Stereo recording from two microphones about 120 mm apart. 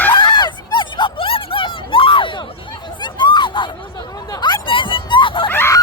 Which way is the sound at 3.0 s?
40° left (ahead or behind).